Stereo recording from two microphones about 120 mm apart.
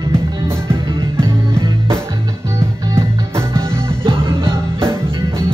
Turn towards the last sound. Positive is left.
turn(degrees=-20)  # may be behind; listen again after turning